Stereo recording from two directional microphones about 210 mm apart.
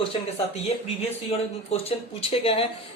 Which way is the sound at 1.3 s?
25° left (ahead or behind).